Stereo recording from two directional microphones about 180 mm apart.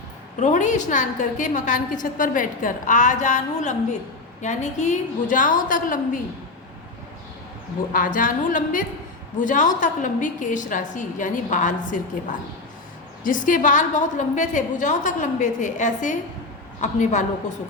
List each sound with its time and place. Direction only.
0.3 s a woman's voice: 45° left (ahead or behind)
7.9 s a woman's voice: 50° left (ahead or behind)